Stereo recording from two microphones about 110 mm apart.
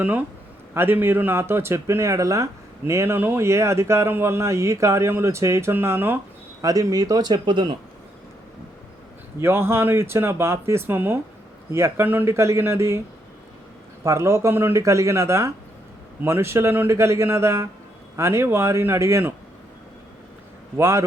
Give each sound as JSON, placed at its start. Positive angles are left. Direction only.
{"t": 0.0, "sound": "speech", "side_deg": -15}
{"t": 6.6, "sound": "a man's voice", "side_deg": -30}
{"t": 9.4, "sound": "speech", "side_deg": -20}
{"t": 14.0, "sound": "speech", "side_deg": -25}
{"t": 20.7, "sound": "speech", "side_deg": -25}